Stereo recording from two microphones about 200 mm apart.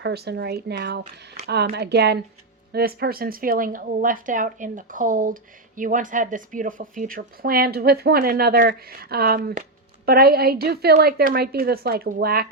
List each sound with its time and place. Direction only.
0.0 s speech: 55° right (ahead or behind)